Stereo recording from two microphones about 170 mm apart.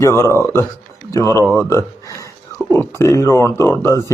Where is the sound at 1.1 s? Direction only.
20° left (ahead or behind).